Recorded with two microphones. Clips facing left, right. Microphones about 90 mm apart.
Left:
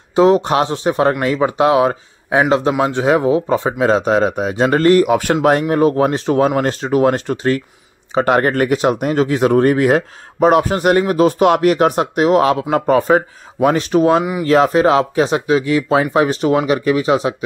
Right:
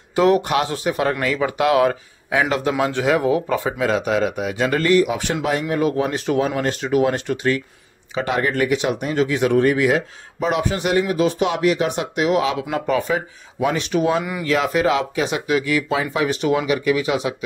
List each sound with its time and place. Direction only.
0.1 s speech: 25° left (ahead or behind)